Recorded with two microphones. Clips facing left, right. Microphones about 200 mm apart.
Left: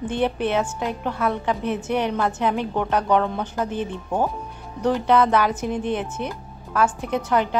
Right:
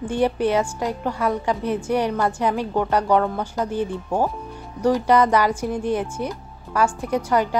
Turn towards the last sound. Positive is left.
turn(degrees=-10)  # may be behind; listen again after turning